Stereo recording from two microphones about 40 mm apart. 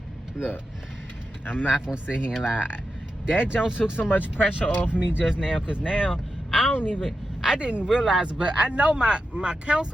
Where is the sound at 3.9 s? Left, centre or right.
Left.